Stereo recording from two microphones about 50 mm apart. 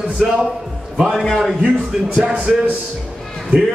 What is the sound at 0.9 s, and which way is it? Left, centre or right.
Speech, centre.